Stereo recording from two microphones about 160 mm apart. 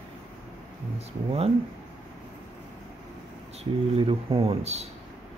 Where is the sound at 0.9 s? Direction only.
40° right (ahead or behind).